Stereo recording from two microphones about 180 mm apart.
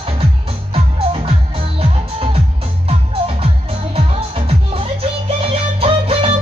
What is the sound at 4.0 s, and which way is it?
Music, 30° right (ahead or behind).